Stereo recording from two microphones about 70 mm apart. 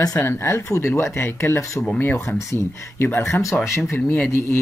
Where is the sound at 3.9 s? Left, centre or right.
Left.